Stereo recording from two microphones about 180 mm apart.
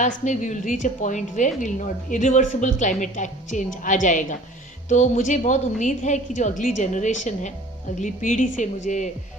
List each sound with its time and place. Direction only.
0.3 s a woman's voice: 45° left (ahead or behind)